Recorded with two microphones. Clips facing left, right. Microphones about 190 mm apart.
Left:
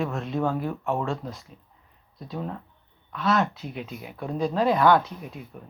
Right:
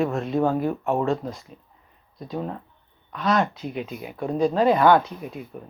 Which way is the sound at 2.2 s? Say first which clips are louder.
Right 3 dB; centre (ahead or behind).